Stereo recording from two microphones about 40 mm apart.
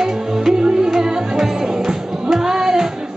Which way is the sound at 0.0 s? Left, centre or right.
Centre.